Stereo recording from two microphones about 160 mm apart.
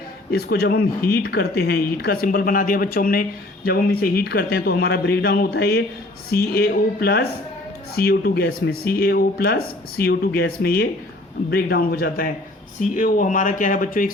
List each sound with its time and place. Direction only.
0.3 s speech: 75° left (ahead or behind); by 14.1 s 60° left (ahead or behind)